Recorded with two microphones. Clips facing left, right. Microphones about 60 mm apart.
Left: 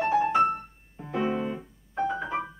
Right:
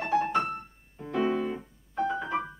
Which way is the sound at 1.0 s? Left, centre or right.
Centre.